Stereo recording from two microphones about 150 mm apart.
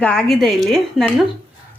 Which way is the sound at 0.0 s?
5° left (ahead or behind).